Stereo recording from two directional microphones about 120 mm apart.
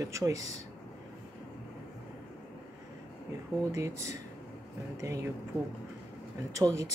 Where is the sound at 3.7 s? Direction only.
25° right (ahead or behind).